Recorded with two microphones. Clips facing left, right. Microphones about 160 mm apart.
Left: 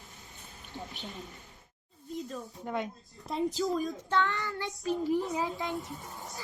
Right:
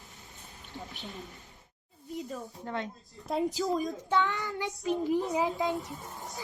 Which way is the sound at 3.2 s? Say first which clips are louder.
Right 1 dB; 5° right (ahead or behind).